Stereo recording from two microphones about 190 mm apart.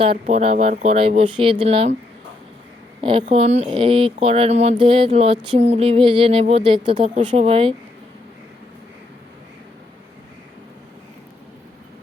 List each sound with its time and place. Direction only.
0.0 s speech: 30° right (ahead or behind)
3.0 s speech: 25° right (ahead or behind)